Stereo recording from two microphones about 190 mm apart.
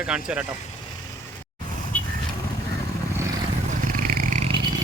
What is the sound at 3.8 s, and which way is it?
Purr, 45° right (ahead or behind).